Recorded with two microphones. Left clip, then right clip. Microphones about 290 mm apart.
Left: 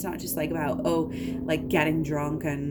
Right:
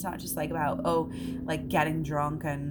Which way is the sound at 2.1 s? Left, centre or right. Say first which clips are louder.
Left 1 dB; centre.